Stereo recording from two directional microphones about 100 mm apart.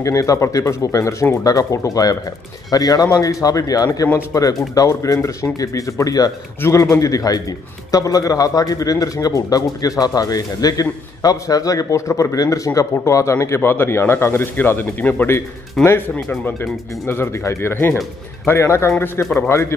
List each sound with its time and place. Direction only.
0.0 s a man's voice: 35° left (ahead or behind)
19.2 s a man's voice: 10° left (ahead or behind)